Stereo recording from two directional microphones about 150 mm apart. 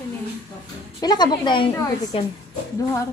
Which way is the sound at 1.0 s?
25° left (ahead or behind).